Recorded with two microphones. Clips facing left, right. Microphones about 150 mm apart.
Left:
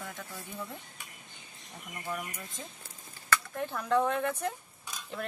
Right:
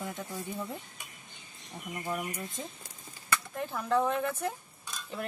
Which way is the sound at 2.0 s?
20° right (ahead or behind).